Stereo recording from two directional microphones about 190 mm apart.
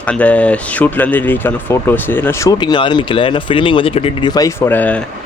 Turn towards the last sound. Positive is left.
turn(degrees=10)  # may be behind; listen again after turning